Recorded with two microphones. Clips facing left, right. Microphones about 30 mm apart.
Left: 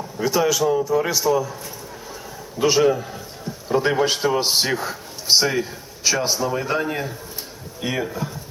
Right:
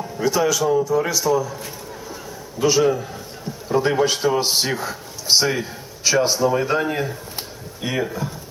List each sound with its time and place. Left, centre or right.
0.2 s a man's voice: centre
2.6 s a man's voice: centre
2.8 s a man's voice: centre